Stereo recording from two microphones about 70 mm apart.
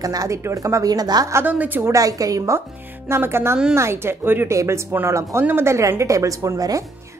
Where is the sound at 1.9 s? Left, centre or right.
Right.